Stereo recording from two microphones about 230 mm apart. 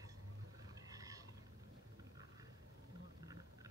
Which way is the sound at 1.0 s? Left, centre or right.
Centre.